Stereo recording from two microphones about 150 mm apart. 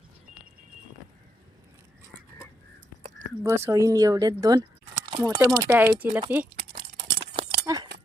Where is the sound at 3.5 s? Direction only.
20° right (ahead or behind).